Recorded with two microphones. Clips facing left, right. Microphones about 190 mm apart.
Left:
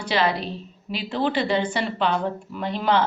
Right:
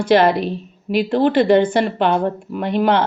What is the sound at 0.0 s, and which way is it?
A woman's voice, 50° right (ahead or behind).